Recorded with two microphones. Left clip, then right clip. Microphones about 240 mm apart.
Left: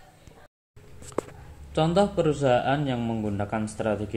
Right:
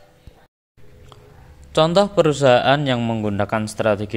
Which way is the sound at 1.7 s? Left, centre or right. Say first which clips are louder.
Right 7 dB; right.